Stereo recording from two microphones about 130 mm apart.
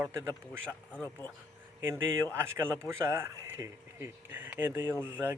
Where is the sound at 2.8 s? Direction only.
20° right (ahead or behind).